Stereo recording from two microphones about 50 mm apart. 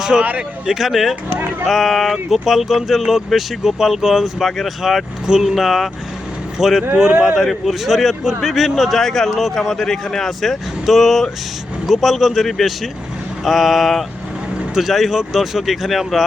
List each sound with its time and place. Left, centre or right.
0.2 s speech: right
0.7 s speech: centre
5.2 s speech: centre
5.5 s speech: centre